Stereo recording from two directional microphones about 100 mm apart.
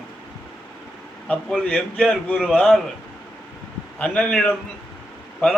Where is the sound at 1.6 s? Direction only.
10° left (ahead or behind).